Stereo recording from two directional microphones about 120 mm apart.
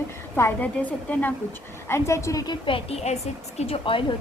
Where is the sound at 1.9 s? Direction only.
25° left (ahead or behind).